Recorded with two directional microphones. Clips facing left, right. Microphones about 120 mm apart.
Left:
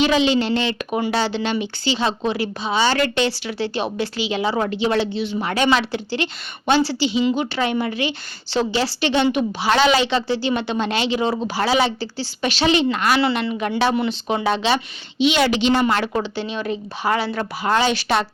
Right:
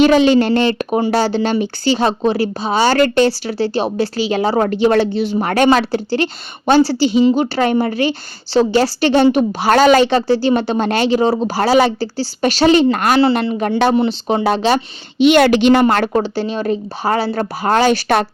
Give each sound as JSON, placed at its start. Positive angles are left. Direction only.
{"t": 0.0, "sound": "a woman's voice", "side_deg": -45}
{"t": 15.2, "sound": "a woman's voice", "side_deg": -55}